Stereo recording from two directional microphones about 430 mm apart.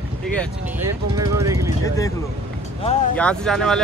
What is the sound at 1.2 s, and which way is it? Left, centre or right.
Speech, centre.